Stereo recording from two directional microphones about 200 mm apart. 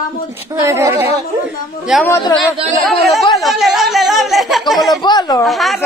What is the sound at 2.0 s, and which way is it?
Speech, 20° left (ahead or behind).